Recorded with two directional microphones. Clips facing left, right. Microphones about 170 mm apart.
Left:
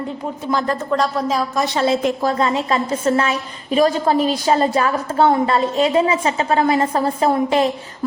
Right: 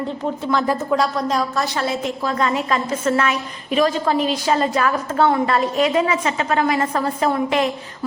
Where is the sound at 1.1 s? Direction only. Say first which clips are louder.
Left 1 dB; 5° left (ahead or behind).